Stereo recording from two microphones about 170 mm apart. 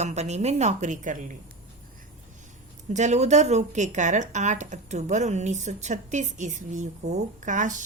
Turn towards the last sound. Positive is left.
turn(degrees=-50)  # may be behind; listen again after turning